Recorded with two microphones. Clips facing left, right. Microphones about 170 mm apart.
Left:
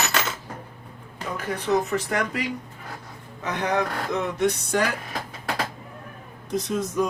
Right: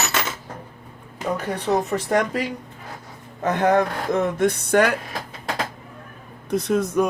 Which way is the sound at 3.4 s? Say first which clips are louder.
Right 6 dB; 50° right (ahead or behind).